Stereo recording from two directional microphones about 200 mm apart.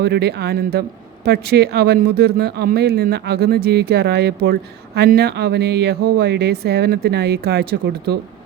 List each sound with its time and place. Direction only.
0.0 s speech: 55° right (ahead or behind)